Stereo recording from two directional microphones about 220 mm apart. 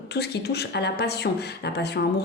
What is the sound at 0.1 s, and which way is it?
A woman's voice, 50° left (ahead or behind).